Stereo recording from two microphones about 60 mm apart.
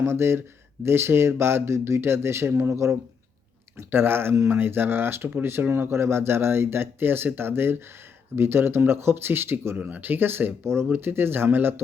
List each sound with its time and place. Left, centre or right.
0.0 s speech: right
3.8 s speech: right